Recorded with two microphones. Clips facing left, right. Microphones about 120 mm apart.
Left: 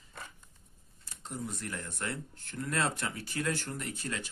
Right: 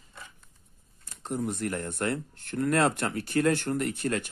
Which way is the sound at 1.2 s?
60° right (ahead or behind).